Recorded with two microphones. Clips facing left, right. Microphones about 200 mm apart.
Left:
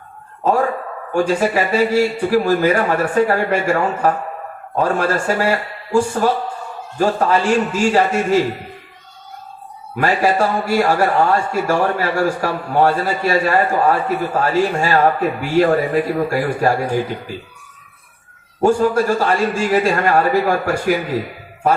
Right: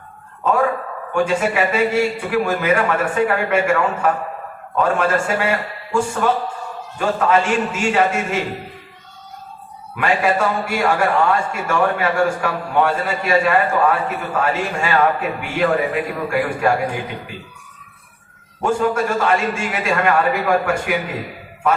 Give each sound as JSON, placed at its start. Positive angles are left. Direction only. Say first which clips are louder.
{"t": 1.1, "sound": "a man's voice", "louder": "left 2 dB", "side_deg": 35}
{"t": 9.9, "sound": "a man's voice", "louder": "left 2 dB", "side_deg": 35}
{"t": 18.6, "sound": "a man's voice", "louder": "left 4 dB", "side_deg": 35}